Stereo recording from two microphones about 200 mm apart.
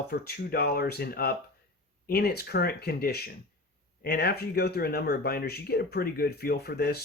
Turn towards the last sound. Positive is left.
turn(degrees=55)  # may be behind; listen again after turning